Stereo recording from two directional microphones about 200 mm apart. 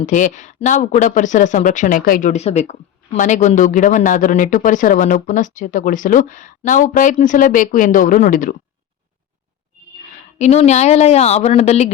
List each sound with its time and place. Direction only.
0.0 s speech: 40° left (ahead or behind)
10.3 s speech: 35° left (ahead or behind)